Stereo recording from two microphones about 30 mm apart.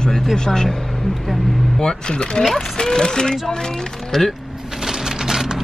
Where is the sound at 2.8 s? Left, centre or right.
Left.